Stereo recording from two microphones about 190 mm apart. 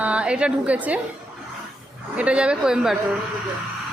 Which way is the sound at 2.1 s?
5° right (ahead or behind).